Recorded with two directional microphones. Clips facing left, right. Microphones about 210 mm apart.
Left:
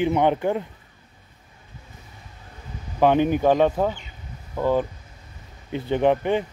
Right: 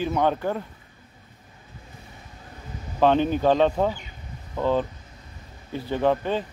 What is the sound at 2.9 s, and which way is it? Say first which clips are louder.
Speech: left 2 dB; 15° left (ahead or behind).